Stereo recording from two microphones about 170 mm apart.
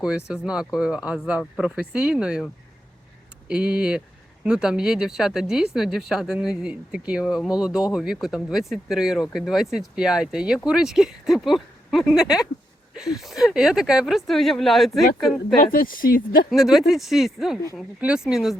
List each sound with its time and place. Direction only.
0.4 s speech: 5° right (ahead or behind)
3.5 s speech: 5° right (ahead or behind)
15.7 s speech: 55° left (ahead or behind)
16.5 s speech: centre (ahead or behind)